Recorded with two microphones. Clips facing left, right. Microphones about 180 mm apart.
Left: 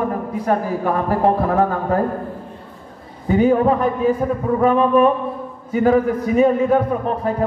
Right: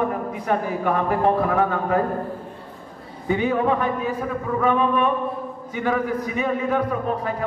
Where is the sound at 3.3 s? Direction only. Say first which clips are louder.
Left 6 dB; 40° left (ahead or behind).